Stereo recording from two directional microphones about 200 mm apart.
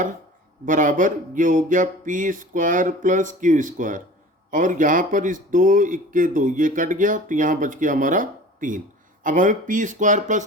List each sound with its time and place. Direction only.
0.6 s speech: 40° right (ahead or behind)